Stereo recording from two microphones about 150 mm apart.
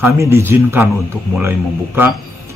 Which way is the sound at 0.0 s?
15° right (ahead or behind).